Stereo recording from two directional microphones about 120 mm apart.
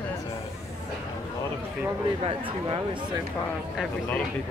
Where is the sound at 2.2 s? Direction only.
45° right (ahead or behind).